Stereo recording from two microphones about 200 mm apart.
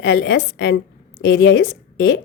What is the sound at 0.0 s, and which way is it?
A woman's voice, 60° left (ahead or behind).